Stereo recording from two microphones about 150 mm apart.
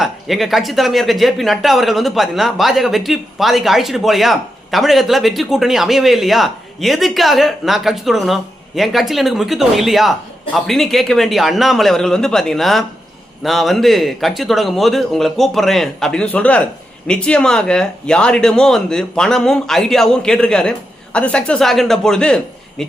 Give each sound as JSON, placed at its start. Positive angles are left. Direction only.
{"t": 0.0, "sound": "speech", "side_deg": 0}